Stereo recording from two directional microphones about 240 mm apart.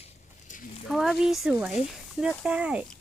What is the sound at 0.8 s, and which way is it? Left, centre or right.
Speech, centre.